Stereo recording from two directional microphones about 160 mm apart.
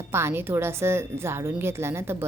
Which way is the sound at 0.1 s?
15° right (ahead or behind).